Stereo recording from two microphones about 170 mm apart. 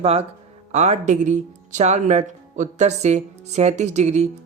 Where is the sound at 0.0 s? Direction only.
35° right (ahead or behind).